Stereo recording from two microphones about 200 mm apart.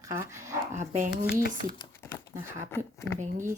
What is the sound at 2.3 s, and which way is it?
Speech, 15° right (ahead or behind).